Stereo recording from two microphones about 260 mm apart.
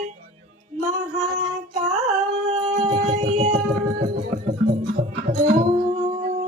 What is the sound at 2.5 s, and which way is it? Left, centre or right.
Music, right.